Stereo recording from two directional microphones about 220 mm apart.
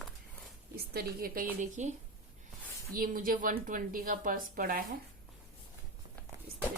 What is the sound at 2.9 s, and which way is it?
A woman's voice, 40° right (ahead or behind).